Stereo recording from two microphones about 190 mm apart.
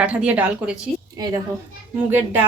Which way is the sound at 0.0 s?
5° right (ahead or behind).